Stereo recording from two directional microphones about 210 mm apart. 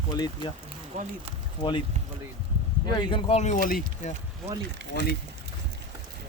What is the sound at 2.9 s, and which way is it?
Speech, 25° left (ahead or behind).